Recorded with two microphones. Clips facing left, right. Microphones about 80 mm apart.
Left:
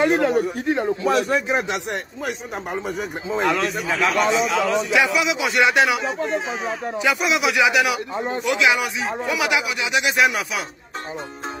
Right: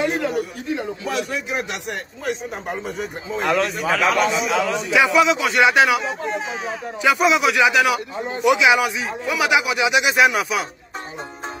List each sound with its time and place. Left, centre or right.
0.0 s a man's voice: left
1.5 s speech: left
3.4 s a man's voice: centre
8.5 s a man's voice: centre